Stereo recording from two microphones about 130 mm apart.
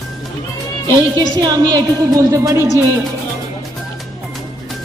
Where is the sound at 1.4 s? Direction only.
30° right (ahead or behind).